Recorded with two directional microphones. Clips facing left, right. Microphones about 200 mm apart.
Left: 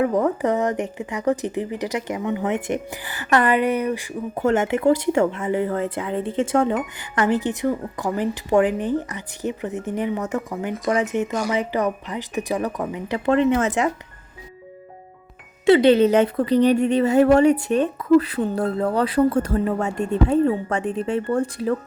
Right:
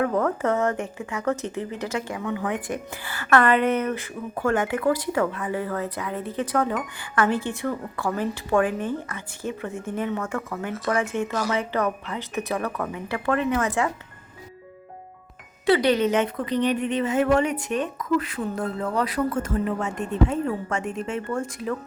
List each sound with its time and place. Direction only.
0.0 s a woman's voice: 15° left (ahead or behind)
15.6 s a woman's voice: 25° left (ahead or behind)